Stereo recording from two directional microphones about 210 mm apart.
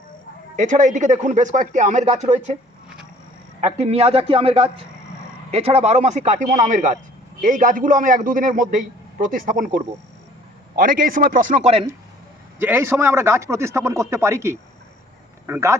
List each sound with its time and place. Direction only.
0.5 s speech: 35° right (ahead or behind)
3.6 s a man's voice: 30° right (ahead or behind)
12.5 s a man's voice: 10° right (ahead or behind)